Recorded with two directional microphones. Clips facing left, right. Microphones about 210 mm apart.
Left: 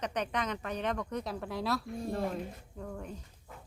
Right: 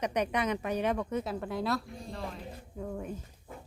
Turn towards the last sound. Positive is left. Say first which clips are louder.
# right 4 dB
turn(degrees=-10)  # may be behind; listen again after turning